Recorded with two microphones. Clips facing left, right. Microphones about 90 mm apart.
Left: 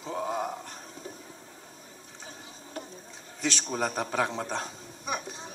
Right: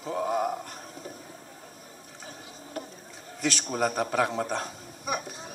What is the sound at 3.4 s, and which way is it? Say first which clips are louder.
A man's voice: right 2 dB; 25° left (ahead or behind).